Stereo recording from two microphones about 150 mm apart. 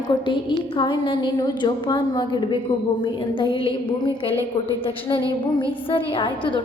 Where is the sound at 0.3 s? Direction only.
30° left (ahead or behind).